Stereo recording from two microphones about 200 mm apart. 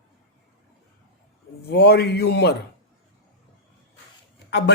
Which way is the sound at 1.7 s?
55° left (ahead or behind).